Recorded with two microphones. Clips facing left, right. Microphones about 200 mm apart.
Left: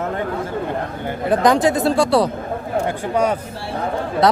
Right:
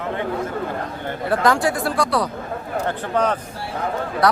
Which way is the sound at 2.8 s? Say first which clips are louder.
Left 1 dB; 10° left (ahead or behind).